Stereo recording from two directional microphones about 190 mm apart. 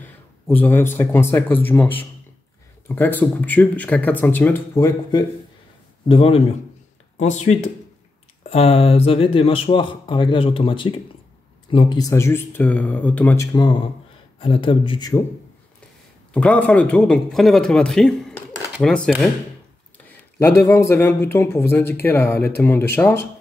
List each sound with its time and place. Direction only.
0.0 s speech: 10° left (ahead or behind)
6.0 s speech: 30° left (ahead or behind); by 13.5 s 10° left (ahead or behind)
13.5 s speech: 25° left (ahead or behind)
16.3 s a man's voice: 10° left (ahead or behind)
20.1 s speech: 15° left (ahead or behind)